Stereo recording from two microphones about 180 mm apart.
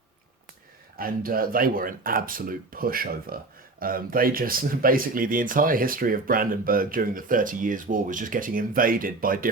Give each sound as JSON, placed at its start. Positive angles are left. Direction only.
{"t": 0.9, "sound": "speech", "side_deg": -55}